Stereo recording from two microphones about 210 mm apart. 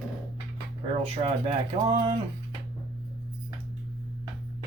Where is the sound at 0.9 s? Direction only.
30° right (ahead or behind).